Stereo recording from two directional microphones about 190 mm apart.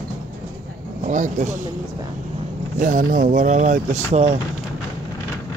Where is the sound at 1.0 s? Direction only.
40° right (ahead or behind).